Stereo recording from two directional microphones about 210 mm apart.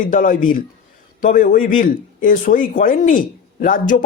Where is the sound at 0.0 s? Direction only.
40° left (ahead or behind).